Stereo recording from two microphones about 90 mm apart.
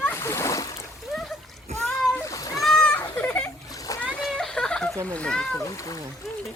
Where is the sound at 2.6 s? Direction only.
5° left (ahead or behind).